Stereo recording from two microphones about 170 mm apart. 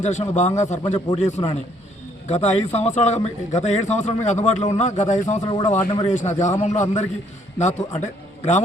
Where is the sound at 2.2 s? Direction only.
40° left (ahead or behind).